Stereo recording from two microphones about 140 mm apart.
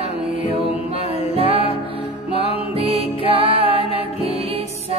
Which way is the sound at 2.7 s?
45° right (ahead or behind).